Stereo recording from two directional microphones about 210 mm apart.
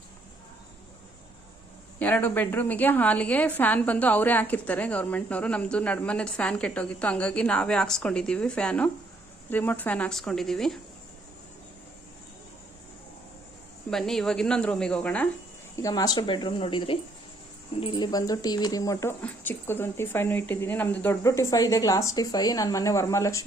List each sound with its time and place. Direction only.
2.0 s a woman's voice: 5° left (ahead or behind)
13.9 s a woman's voice: centre (ahead or behind)